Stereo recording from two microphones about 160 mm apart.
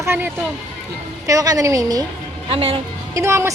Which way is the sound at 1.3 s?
20° right (ahead or behind).